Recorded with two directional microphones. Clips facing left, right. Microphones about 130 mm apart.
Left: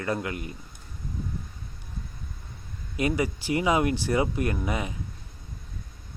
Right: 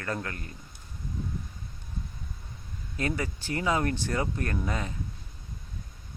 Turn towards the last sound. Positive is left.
turn(degrees=15)  # may be behind; listen again after turning